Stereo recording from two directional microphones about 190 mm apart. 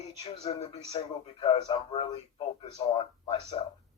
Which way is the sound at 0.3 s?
30° left (ahead or behind).